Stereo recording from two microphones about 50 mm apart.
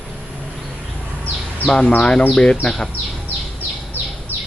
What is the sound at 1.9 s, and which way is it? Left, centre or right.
Speech, left.